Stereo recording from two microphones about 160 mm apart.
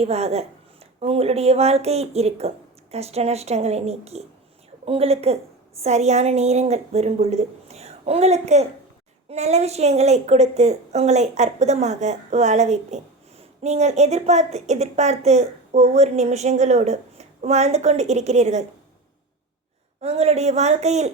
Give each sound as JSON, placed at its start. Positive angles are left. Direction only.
{"t": 0.0, "sound": "a woman's voice", "side_deg": -40}
{"t": 20.0, "sound": "a woman's voice", "side_deg": -40}